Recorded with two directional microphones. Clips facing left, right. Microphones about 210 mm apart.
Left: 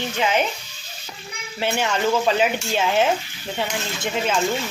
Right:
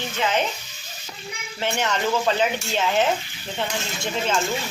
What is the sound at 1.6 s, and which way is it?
Speech, 10° left (ahead or behind).